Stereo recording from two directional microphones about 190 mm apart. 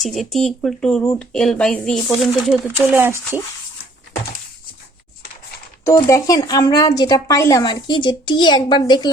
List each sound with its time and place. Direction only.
0.0 s speech: centre (ahead or behind)
5.8 s speech: 15° left (ahead or behind)